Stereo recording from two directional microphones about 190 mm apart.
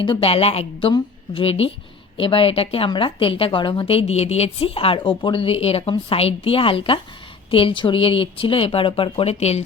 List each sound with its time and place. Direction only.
0.0 s a woman's voice: 30° left (ahead or behind)